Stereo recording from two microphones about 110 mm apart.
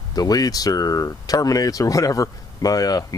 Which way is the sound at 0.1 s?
35° left (ahead or behind).